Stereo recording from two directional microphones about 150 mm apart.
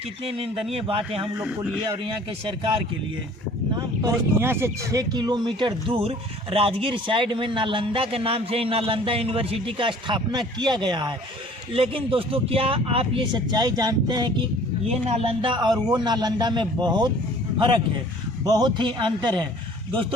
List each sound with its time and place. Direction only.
0.3 s speech: 40° right (ahead or behind)
1.4 s speech: 5° right (ahead or behind)
3.8 s speech: 20° right (ahead or behind)
14.8 s a man's voice: 45° right (ahead or behind)